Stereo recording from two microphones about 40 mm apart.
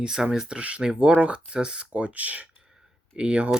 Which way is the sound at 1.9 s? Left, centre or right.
Right.